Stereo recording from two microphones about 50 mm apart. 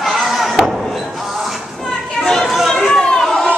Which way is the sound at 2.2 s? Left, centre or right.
Centre.